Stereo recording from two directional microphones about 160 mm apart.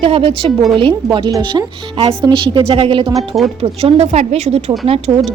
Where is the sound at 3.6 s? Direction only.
40° right (ahead or behind).